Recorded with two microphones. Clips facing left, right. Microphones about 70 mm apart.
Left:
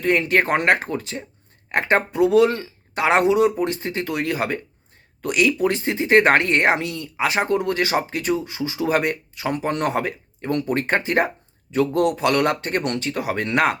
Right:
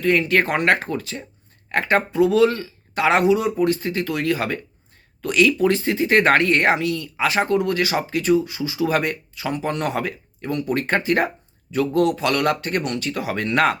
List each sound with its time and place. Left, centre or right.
0.0 s speech: left